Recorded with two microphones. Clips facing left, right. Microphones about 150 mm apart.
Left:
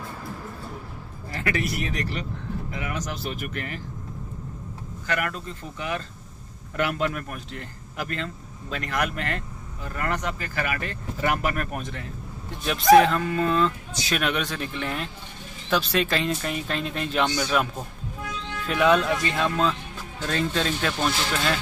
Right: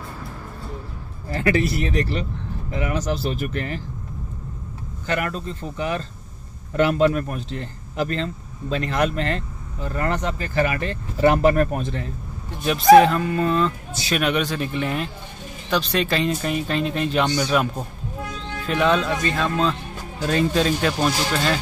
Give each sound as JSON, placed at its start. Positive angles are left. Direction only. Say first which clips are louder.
{"t": 1.3, "sound": "speech", "louder": "right 7 dB", "side_deg": -30}
{"t": 5.0, "sound": "speech", "louder": "right 3 dB", "side_deg": -30}
{"t": 12.6, "sound": "speech", "louder": "right 4 dB", "side_deg": 0}
{"t": 18.7, "sound": "speech", "louder": "right 1 dB", "side_deg": 5}
{"t": 20.2, "sound": "speech", "louder": "right 6 dB", "side_deg": -15}